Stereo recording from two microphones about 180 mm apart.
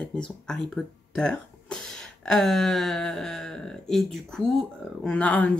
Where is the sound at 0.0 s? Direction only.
5° left (ahead or behind).